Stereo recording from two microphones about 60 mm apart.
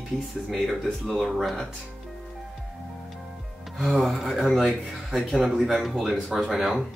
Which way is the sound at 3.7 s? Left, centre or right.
Centre.